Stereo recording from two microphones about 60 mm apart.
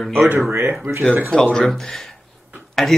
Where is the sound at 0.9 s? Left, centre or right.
Right.